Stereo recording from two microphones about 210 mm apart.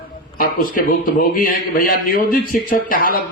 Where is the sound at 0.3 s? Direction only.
40° left (ahead or behind).